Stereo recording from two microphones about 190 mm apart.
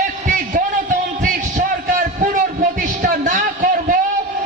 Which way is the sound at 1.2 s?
40° right (ahead or behind).